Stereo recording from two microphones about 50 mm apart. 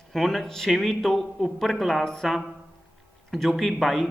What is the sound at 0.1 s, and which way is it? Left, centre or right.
Speech, centre.